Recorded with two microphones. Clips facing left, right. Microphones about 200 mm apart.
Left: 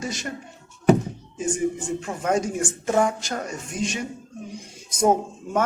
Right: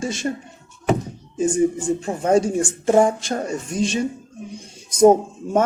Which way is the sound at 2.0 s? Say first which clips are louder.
Right 7 dB; 30° right (ahead or behind).